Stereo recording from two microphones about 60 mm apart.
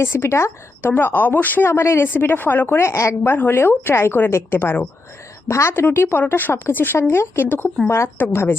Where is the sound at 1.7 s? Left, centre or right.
Left.